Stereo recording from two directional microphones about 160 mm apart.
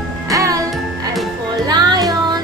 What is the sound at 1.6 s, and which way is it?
Music, 25° right (ahead or behind).